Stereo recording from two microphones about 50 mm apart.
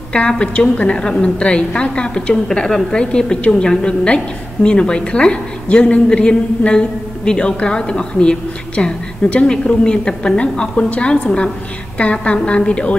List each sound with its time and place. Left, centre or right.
0.4 s a woman's voice: left